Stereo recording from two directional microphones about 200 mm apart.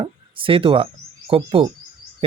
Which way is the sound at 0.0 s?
25° right (ahead or behind).